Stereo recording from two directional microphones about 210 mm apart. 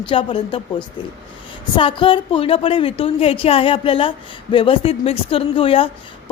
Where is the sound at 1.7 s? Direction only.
25° left (ahead or behind).